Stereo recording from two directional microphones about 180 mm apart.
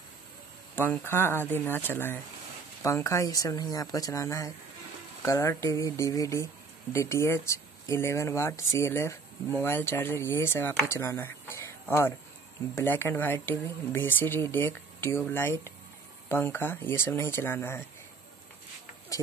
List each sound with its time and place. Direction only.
1.0 s speech: 10° left (ahead or behind)